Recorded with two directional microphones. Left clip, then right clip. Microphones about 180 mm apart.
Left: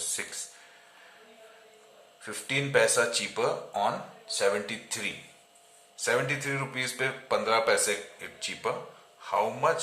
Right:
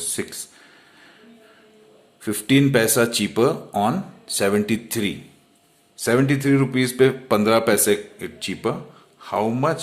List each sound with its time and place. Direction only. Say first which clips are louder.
0.2 s a man's voice: right 8 dB; 40° right (ahead or behind)
2.2 s a man's voice: right 12 dB; 50° right (ahead or behind)